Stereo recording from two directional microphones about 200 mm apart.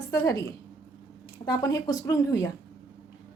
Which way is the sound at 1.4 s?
20° left (ahead or behind).